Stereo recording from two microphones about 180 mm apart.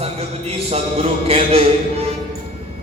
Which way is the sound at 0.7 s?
35° right (ahead or behind).